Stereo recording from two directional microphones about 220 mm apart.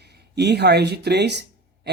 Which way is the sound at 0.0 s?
50° right (ahead or behind).